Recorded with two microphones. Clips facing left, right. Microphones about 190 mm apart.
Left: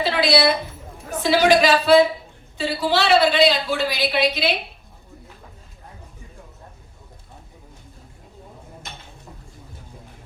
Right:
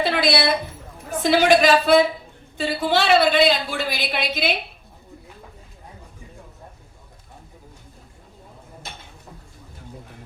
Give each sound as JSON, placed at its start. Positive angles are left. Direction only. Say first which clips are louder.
{"t": 0.0, "sound": "a woman's voice", "louder": "left 2 dB", "side_deg": -50}